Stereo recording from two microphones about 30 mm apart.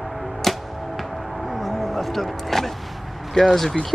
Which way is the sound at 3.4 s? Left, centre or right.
Left.